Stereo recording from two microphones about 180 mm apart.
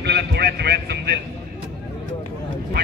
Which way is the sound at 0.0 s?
65° right (ahead or behind).